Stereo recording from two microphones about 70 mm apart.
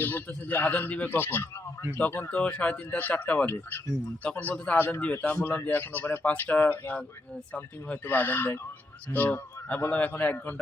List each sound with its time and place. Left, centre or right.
0.0 s speech: left